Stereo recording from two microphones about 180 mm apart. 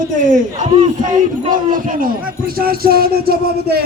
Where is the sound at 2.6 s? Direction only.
55° right (ahead or behind).